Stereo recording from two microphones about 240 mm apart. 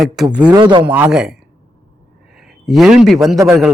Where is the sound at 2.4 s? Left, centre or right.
Centre.